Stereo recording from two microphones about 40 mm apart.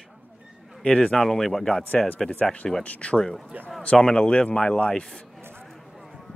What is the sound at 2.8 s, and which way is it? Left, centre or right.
Speech, left.